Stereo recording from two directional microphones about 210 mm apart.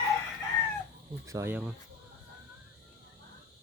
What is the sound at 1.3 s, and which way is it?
Speech, 10° right (ahead or behind).